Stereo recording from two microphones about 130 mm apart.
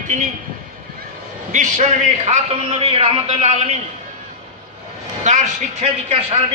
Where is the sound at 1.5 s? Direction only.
70° right (ahead or behind).